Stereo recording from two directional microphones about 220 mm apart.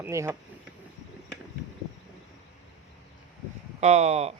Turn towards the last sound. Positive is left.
turn(degrees=-30)  # may be behind; listen again after turning